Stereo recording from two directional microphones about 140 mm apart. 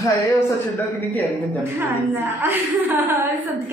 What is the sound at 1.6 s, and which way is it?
A woman's voice, 15° right (ahead or behind).